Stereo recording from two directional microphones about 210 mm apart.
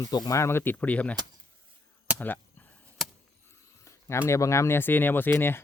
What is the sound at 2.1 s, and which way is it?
Chop, 10° left (ahead or behind).